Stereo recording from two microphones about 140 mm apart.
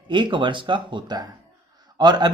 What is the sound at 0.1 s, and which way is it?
Speech, 35° right (ahead or behind).